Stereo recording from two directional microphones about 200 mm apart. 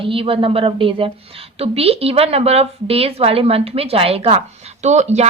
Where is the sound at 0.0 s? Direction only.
25° right (ahead or behind).